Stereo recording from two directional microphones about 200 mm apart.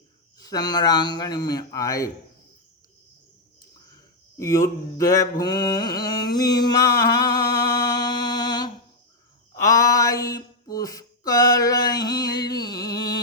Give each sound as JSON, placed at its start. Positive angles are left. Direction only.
{"t": 0.3, "sound": "a man's voice", "side_deg": 20}
{"t": 4.4, "sound": "mantra", "side_deg": 15}
{"t": 9.6, "sound": "a sound", "side_deg": 15}